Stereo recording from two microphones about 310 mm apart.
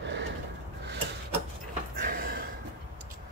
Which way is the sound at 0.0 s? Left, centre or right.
Right.